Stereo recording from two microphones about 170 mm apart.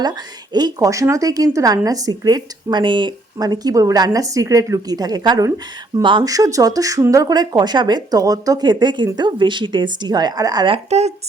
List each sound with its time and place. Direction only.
0.0 s a woman's voice: 25° right (ahead or behind)
10.8 s speech: 40° right (ahead or behind)